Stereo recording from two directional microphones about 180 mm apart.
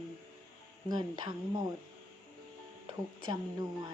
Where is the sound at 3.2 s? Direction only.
25° right (ahead or behind).